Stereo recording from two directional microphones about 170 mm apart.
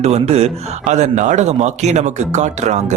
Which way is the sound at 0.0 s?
40° right (ahead or behind).